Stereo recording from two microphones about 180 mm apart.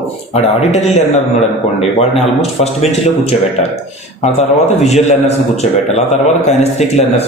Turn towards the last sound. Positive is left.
turn(degrees=35)  # may be behind; listen again after turning